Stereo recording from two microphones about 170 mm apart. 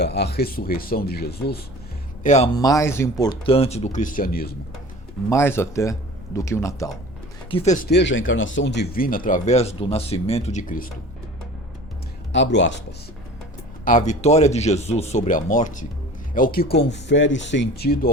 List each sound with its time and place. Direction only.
0.0 s speech: 80° left
2.2 s speech: 45° left (ahead or behind)
2.6 s speech: 20° left (ahead or behind)
3.4 s speech: 35° left (ahead or behind); by 4.5 s 60° left (ahead or behind)
5.3 s speech: 15° left (ahead or behind)
7.5 s speech: 45° left (ahead or behind)
7.9 s speech: 85° left; by 10.6 s 40° left (ahead or behind)
12.3 s speech: 90° left
13.8 s speech: 45° left (ahead or behind); by 18.1 s 65° left (ahead or behind)